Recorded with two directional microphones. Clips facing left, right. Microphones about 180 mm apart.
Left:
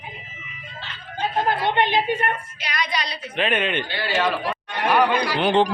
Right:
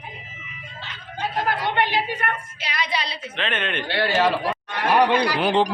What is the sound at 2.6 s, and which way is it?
Speech, 30° right (ahead or behind).